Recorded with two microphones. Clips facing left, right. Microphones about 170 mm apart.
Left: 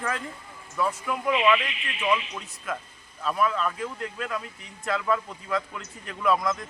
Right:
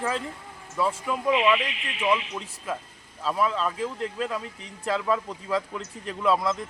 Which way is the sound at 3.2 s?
25° right (ahead or behind).